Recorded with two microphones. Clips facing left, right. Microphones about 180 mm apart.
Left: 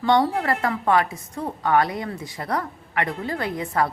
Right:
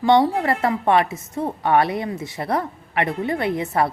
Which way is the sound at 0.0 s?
20° right (ahead or behind).